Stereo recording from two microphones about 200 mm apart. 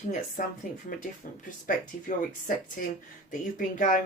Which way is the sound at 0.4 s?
45° left (ahead or behind).